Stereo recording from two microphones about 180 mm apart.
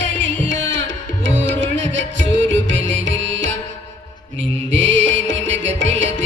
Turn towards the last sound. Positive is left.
turn(degrees=-90)